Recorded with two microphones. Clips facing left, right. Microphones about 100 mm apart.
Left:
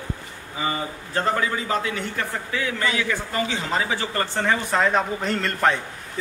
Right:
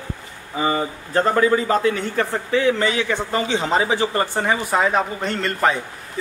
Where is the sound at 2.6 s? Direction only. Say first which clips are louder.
Right 3 dB; 30° right (ahead or behind); by 5.8 s centre (ahead or behind).